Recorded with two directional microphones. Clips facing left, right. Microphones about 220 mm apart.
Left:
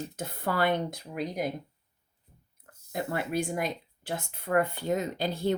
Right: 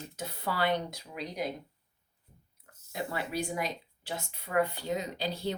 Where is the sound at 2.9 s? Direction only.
50° left (ahead or behind).